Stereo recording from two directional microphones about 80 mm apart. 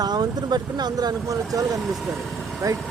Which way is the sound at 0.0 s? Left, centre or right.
Right.